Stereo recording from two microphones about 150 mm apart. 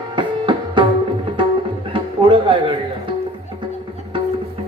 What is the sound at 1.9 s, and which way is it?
Music, 30° right (ahead or behind).